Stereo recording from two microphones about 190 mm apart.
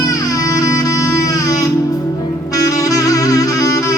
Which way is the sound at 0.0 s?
20° left (ahead or behind).